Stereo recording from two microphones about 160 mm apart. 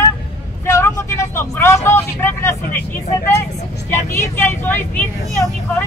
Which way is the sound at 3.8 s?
15° left (ahead or behind).